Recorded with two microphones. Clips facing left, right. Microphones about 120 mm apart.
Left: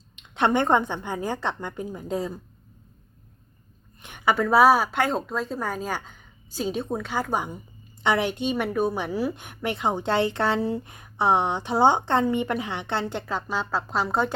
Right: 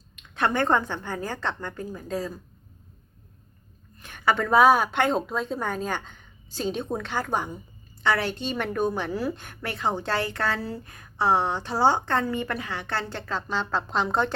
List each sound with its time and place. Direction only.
0.2 s a woman's voice: 25° left (ahead or behind)
4.0 s a sound: 15° left (ahead or behind)
4.4 s a woman's voice: 5° left (ahead or behind)